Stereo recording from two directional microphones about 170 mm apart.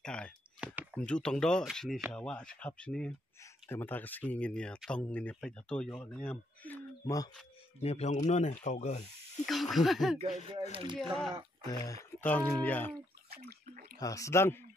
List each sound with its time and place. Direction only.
0.0 s a sound: 5° left (ahead or behind)
0.9 s speech: 5° left (ahead or behind)
7.8 s a man's voice: 40° left (ahead or behind)
9.5 s speech: centre (ahead or behind)
10.7 s speech: 30° right (ahead or behind)
11.0 s speech: centre (ahead or behind)
11.7 s speech: 20° left (ahead or behind)
13.3 s bathtub: 65° right (ahead or behind)
13.9 s speech: 20° left (ahead or behind)